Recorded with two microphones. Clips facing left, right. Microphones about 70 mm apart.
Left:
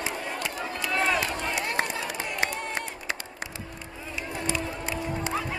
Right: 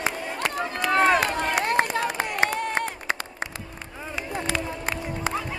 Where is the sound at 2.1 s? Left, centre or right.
Right.